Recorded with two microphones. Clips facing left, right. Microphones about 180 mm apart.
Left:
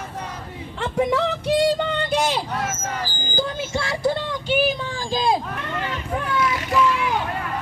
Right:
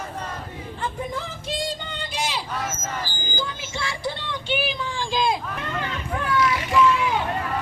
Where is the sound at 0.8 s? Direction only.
80° left; by 2.4 s 55° left (ahead or behind).